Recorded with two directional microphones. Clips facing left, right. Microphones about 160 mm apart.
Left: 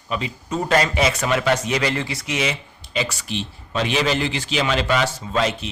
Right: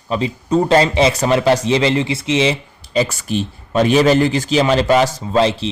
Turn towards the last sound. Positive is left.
turn(degrees=-30)  # may be behind; listen again after turning